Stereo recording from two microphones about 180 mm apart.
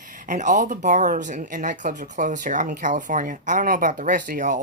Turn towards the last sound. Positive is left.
turn(degrees=-45)  # may be behind; listen again after turning